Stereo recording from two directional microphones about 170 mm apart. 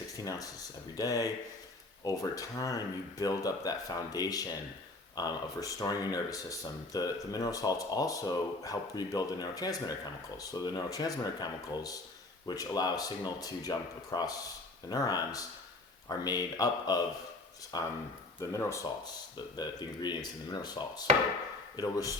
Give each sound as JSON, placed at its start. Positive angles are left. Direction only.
{"t": 0.9, "sound": "speech", "side_deg": 20}